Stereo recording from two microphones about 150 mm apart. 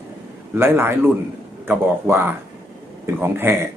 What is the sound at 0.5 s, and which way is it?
Speech, 15° right (ahead or behind).